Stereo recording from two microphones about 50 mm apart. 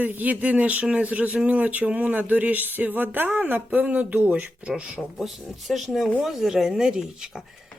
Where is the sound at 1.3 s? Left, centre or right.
Right.